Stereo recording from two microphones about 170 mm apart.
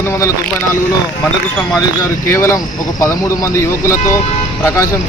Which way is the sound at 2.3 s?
15° left (ahead or behind).